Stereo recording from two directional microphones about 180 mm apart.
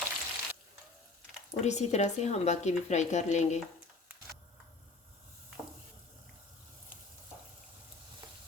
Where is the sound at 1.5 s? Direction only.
40° left (ahead or behind).